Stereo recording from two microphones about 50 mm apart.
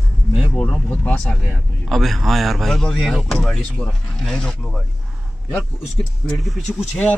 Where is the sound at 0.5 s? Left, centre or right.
Left.